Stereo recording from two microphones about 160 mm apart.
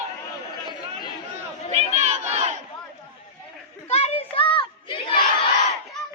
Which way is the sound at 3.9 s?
40° left (ahead or behind).